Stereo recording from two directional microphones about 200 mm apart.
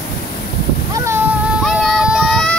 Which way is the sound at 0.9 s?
15° right (ahead or behind).